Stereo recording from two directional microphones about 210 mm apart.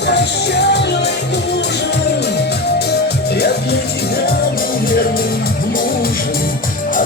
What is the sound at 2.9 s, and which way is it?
Music, 50° left (ahead or behind).